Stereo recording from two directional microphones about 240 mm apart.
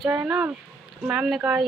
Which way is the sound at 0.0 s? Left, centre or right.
Centre.